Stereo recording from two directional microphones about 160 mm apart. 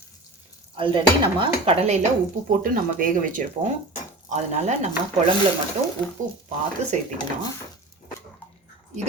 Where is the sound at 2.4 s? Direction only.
55° right (ahead or behind).